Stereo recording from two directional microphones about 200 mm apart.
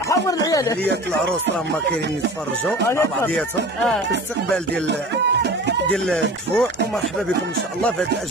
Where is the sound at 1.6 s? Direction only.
60° right (ahead or behind).